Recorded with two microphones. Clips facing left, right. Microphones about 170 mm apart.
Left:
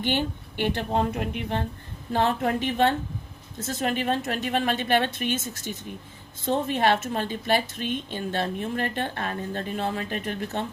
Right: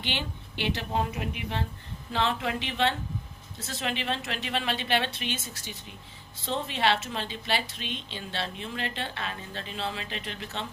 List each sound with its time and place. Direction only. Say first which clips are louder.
0.0 s a woman's voice: left 8 dB; 50° left (ahead or behind)